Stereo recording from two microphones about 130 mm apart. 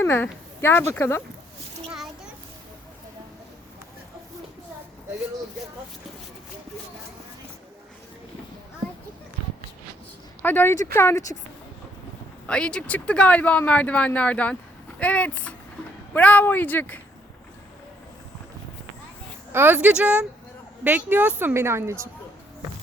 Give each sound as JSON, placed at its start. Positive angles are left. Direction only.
{"t": 0.0, "sound": "speech", "side_deg": 15}
{"t": 10.4, "sound": "speech", "side_deg": 15}
{"t": 12.5, "sound": "speech", "side_deg": 10}
{"t": 19.5, "sound": "a woman's voice", "side_deg": -15}